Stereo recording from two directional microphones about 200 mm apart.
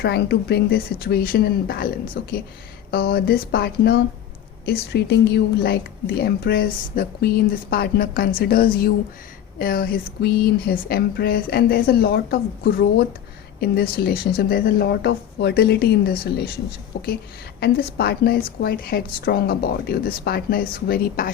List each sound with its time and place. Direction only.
0.0 s speech: 55° left (ahead or behind)